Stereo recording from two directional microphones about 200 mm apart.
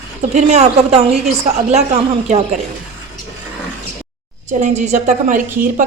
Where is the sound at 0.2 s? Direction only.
35° right (ahead or behind).